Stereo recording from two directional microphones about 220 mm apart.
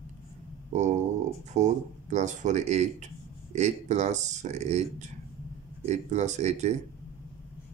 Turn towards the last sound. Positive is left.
turn(degrees=-30)  # may be behind; listen again after turning